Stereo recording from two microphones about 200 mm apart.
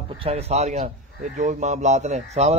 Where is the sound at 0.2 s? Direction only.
30° right (ahead or behind).